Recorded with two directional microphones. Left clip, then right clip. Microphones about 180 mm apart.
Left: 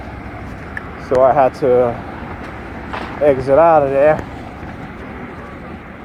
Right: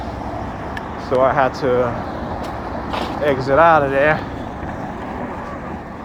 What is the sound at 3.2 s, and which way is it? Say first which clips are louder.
Speech: left 3 dB; 55° left (ahead or behind).